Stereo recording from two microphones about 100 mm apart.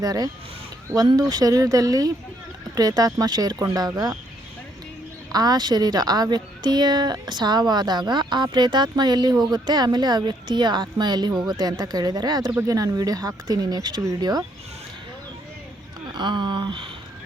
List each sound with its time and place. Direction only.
0.0 s speech: 40° right (ahead or behind)
5.3 s a woman's voice: 40° right (ahead or behind)
16.1 s a woman's voice: 50° right (ahead or behind)